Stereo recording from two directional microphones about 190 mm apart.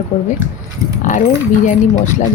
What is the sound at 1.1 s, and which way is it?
Speech, 40° left (ahead or behind).